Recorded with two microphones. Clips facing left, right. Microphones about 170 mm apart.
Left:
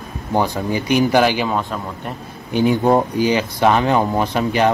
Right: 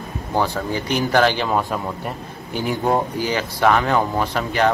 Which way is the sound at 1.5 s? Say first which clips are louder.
Right 1 dB; 5° right (ahead or behind).